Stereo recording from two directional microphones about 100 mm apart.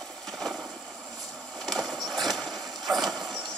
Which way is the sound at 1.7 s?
Centre (ahead or behind).